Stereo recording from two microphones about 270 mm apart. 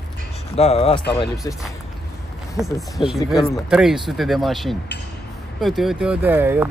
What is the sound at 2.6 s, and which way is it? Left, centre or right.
Speech, centre.